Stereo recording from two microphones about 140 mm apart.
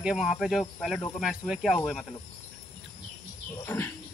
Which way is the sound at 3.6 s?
15° left (ahead or behind).